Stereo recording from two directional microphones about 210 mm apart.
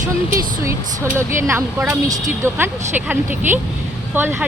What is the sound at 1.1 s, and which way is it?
Speech, 10° right (ahead or behind).